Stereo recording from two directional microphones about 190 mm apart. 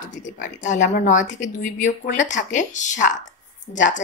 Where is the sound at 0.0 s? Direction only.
40° left (ahead or behind).